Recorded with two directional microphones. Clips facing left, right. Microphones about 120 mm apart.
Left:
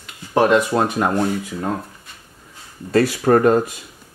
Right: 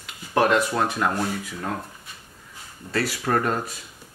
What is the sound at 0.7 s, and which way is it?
Speech, 30° left (ahead or behind).